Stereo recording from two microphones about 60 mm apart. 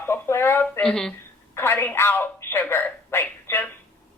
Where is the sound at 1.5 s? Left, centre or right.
Left.